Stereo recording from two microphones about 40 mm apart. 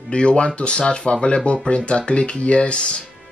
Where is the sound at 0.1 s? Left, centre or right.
Left.